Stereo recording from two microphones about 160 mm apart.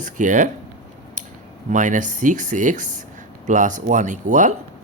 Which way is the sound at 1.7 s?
50° right (ahead or behind).